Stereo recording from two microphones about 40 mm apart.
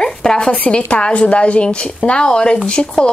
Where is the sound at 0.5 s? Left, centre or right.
Left.